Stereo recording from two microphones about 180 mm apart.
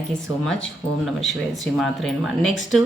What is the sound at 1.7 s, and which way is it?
Speech, centre (ahead or behind).